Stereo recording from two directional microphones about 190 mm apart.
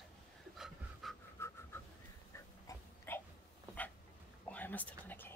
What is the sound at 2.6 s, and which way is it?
Dog, 10° left (ahead or behind).